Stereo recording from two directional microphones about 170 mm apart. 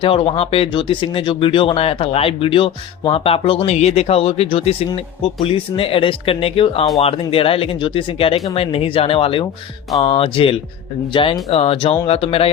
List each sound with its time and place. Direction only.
0.0 s speech: 35° left (ahead or behind)